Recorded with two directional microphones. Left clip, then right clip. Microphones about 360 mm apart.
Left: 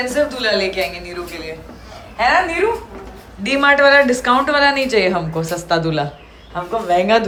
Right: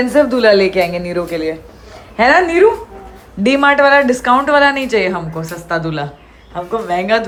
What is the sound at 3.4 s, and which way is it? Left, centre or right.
A woman's voice, centre.